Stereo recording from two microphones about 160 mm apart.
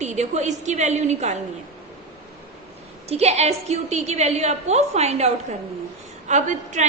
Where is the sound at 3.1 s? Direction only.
40° right (ahead or behind).